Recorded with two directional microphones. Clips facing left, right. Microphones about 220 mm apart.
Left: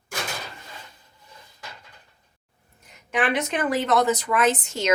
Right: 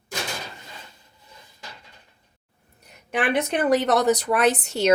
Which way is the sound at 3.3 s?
35° right (ahead or behind).